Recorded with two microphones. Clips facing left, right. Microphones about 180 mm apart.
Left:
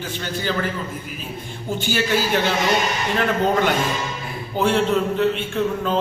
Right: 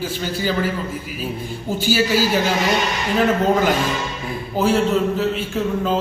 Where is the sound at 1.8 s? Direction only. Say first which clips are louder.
Right 4 dB; 5° right (ahead or behind).